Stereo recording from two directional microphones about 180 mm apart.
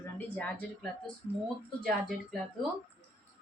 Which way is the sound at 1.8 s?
Centre (ahead or behind).